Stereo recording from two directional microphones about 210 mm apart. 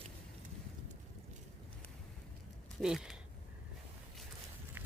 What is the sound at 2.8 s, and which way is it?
Speech, centre (ahead or behind).